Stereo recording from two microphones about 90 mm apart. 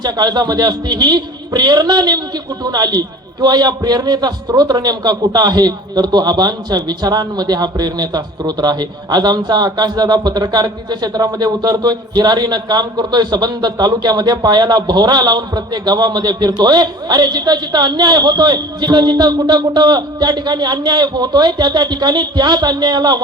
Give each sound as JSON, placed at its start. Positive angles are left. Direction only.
{"t": 0.0, "sound": "a man's voice", "side_deg": -50}